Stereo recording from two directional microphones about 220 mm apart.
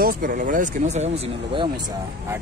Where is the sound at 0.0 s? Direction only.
40° right (ahead or behind).